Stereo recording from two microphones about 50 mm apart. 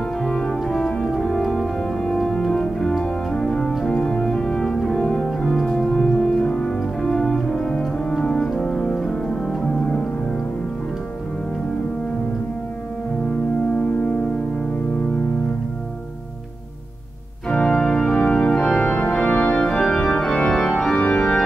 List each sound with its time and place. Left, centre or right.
0.2 s organ: centre
17.5 s organ: centre
18.5 s organ: centre
18.8 s organ: centre
21.0 s organ: left